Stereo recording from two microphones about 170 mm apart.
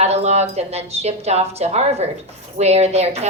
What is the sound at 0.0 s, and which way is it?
A woman's voice, 40° right (ahead or behind).